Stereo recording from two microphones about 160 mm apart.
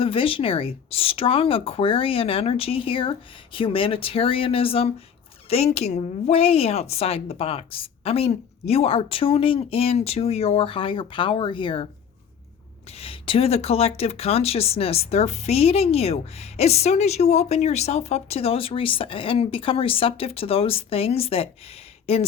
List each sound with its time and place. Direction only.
0.0 s speech: 35° left (ahead or behind)
13.0 s speech: 35° left (ahead or behind)